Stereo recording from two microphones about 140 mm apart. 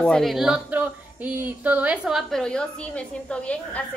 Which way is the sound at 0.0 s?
5° left (ahead or behind).